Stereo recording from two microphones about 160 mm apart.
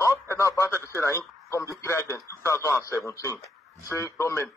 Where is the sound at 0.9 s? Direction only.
15° left (ahead or behind).